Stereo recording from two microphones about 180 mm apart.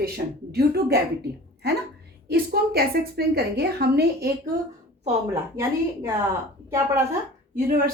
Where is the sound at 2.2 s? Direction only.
60° right (ahead or behind).